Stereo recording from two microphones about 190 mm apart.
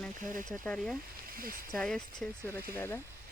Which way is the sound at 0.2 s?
45° right (ahead or behind).